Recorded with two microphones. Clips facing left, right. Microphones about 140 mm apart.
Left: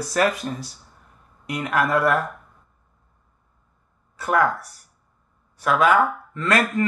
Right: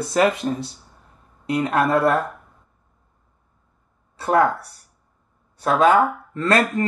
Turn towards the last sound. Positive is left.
turn(degrees=-30)  # may be behind; listen again after turning